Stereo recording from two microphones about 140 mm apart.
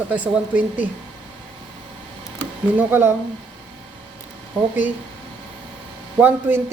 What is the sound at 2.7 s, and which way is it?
Speech, 15° right (ahead or behind).